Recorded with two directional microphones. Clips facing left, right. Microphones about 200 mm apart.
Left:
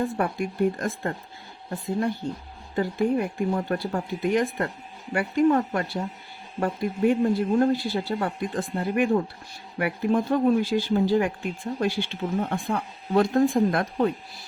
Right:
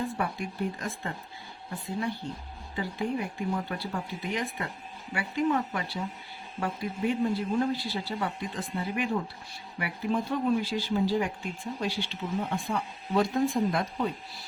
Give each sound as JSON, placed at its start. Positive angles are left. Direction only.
{"t": 0.2, "sound": "a man's voice", "side_deg": 50}
{"t": 2.7, "sound": "a man's voice", "side_deg": 50}